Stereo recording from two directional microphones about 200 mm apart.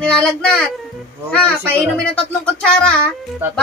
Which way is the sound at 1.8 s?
5° left (ahead or behind).